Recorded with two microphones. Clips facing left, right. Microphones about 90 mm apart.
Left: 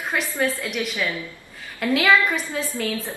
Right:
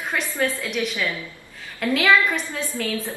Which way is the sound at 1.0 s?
20° left (ahead or behind).